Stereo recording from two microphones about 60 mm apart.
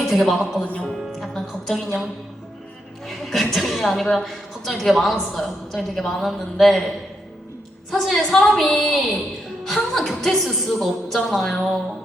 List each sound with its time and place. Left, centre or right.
0.0 s a man's voice: centre
0.6 s speech: left
0.9 s music: centre
3.1 s a woman's voice: centre
7.9 s a woman's voice: centre